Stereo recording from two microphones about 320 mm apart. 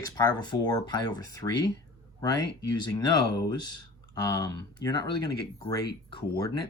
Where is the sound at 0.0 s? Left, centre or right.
Centre.